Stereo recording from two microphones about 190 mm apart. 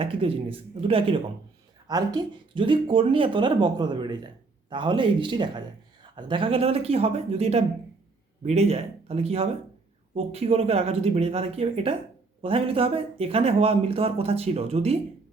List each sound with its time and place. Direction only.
0.0 s speech: 30° right (ahead or behind)